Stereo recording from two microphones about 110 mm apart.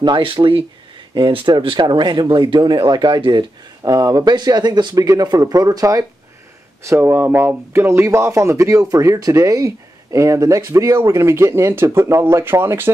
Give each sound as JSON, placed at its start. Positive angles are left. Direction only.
{"t": 0.0, "sound": "speech", "side_deg": -50}